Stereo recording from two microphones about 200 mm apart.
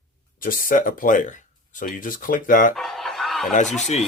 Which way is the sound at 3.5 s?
35° left (ahead or behind).